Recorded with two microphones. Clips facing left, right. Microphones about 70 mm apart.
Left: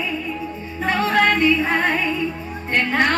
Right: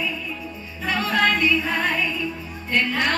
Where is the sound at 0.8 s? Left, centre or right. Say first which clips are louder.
Left 3 dB; left.